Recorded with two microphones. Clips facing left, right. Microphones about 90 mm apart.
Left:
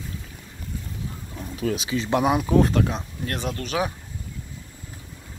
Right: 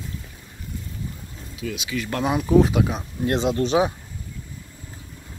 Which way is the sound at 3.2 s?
20° right (ahead or behind).